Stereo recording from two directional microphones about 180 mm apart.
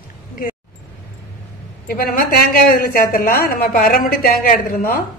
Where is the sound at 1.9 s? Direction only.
55° left (ahead or behind).